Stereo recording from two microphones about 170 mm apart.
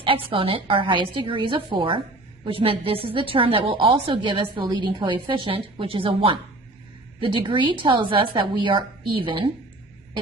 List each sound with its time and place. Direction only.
0.0 s a woman's voice: 30° right (ahead or behind)